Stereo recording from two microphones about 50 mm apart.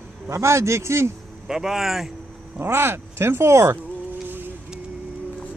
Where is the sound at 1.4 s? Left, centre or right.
Centre.